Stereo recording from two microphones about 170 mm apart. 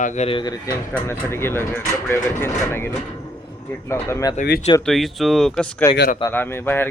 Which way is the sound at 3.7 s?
15° left (ahead or behind).